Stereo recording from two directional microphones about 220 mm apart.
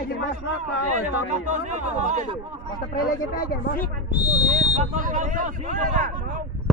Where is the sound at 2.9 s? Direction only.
40° left (ahead or behind).